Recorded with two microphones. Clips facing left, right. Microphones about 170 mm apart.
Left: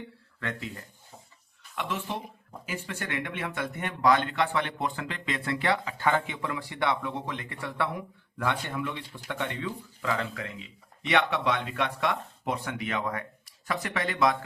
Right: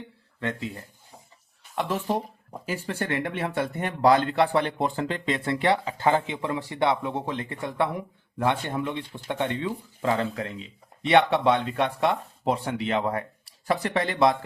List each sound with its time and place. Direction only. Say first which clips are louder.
0.3 s a man's voice: right 5 dB; 25° right (ahead or behind)
1.7 s speech: right 7 dB; 35° right (ahead or behind)